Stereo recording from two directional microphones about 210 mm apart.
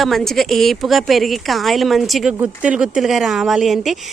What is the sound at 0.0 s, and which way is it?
A woman's voice, centre (ahead or behind).